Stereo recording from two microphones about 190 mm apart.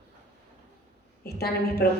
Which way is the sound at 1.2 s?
55° left (ahead or behind).